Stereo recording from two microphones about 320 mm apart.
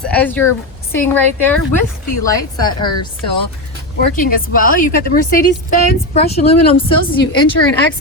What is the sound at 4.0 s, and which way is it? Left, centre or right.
A woman's voice, left.